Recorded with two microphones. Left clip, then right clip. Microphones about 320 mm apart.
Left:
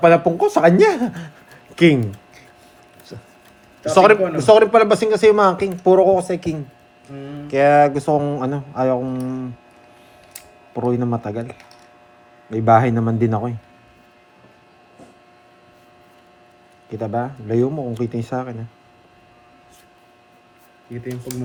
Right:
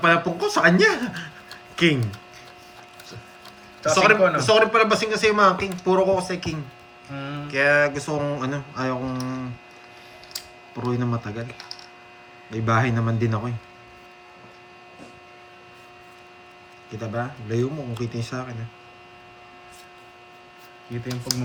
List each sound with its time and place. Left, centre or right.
0.0 s speech: centre
4.1 s speech: centre
10.8 s speech: centre
16.9 s speech: centre